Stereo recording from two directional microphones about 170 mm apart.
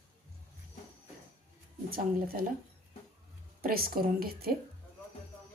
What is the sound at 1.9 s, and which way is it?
Speech, 60° right (ahead or behind).